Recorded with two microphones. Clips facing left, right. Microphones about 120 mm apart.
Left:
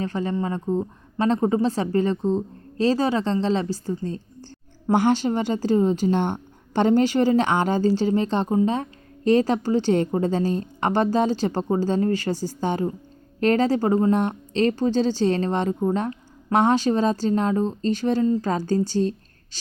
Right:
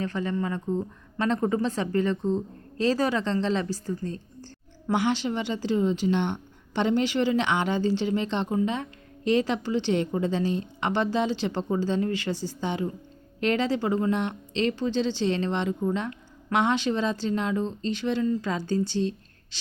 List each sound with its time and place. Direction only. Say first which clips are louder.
0.0 s a woman's voice: left 3 dB; 30° left (ahead or behind)
4.9 s a woman's voice: left 6 dB; 45° left (ahead or behind)